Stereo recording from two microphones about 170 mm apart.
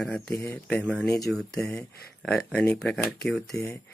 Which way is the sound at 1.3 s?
Centre (ahead or behind).